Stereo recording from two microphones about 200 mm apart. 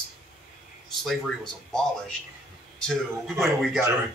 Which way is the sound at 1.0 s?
Centre (ahead or behind).